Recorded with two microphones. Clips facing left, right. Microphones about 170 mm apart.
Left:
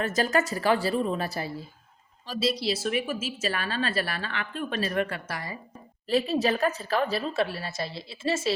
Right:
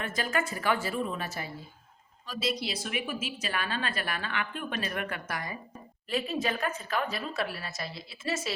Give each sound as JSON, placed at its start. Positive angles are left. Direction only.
{"t": 0.0, "sound": "a woman's voice", "side_deg": 40}